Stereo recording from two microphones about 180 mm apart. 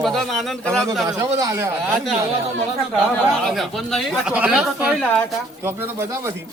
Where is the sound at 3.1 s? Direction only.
Centre (ahead or behind); by 6.3 s 15° right (ahead or behind).